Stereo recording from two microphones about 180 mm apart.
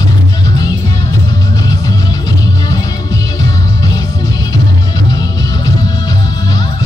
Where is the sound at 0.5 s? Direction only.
20° left (ahead or behind).